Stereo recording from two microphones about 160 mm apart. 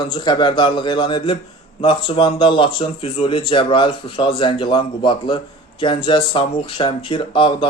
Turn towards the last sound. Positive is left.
turn(degrees=30)  # may be behind; listen again after turning